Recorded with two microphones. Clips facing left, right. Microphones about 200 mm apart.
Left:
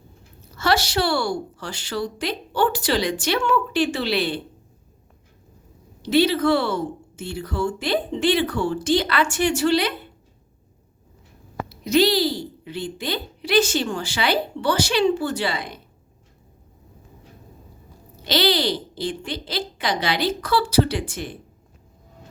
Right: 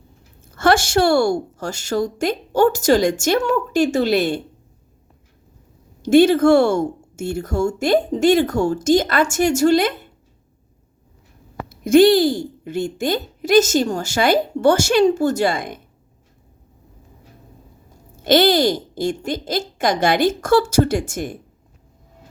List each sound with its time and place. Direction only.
0.4 s speech: 50° right (ahead or behind)
6.0 s speech: 50° right (ahead or behind)
11.7 s speech: 50° right (ahead or behind)
18.2 s speech: 50° right (ahead or behind)